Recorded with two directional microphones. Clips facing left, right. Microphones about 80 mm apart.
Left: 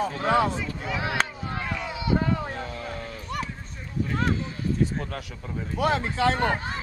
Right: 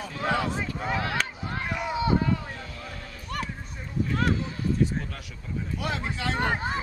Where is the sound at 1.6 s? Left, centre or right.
Centre.